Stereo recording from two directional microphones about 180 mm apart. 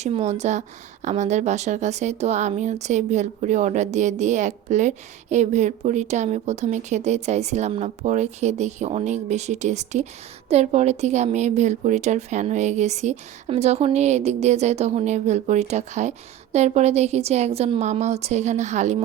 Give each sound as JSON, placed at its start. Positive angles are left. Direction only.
{"t": 0.0, "sound": "speech", "side_deg": -35}